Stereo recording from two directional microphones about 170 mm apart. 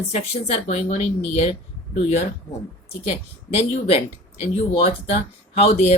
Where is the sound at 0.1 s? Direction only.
40° left (ahead or behind).